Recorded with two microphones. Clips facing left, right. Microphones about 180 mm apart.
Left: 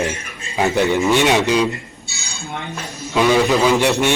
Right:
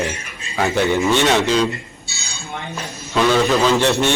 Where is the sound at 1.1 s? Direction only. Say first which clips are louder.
Left 1 dB; 15° left (ahead or behind).